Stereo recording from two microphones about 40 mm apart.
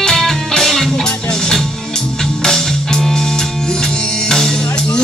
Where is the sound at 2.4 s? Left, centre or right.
Centre.